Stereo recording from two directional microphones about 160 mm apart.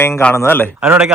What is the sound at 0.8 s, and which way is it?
Speech, 10° right (ahead or behind).